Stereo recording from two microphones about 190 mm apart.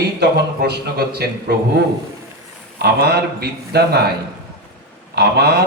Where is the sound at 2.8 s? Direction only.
60° right (ahead or behind).